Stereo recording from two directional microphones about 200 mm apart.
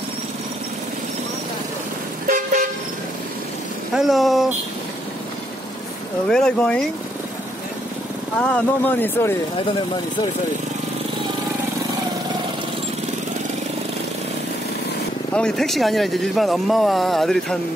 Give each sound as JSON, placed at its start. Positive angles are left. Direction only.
{"t": 2.2, "sound": "toot", "side_deg": -40}
{"t": 3.9, "sound": "speech", "side_deg": 0}
{"t": 6.2, "sound": "speech", "side_deg": 5}
{"t": 8.4, "sound": "speech", "side_deg": 5}
{"t": 15.3, "sound": "speech", "side_deg": 5}